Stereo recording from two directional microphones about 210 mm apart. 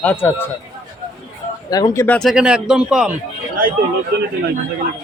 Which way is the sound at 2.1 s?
Centre (ahead or behind).